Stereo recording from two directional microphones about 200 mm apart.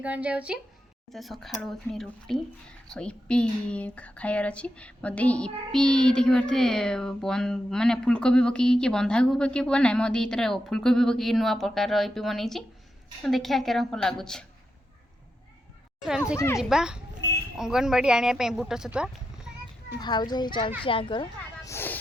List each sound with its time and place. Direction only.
0.0 s speech: 5° right (ahead or behind)
16.0 s speech: 5° right (ahead or behind)
17.2 s a sound: 60° left (ahead or behind)
17.6 s speech: centre (ahead or behind)
20.0 s a child's voice: 20° left (ahead or behind)